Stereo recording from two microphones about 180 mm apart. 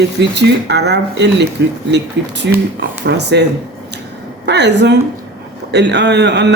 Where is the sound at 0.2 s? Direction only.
70° right (ahead or behind).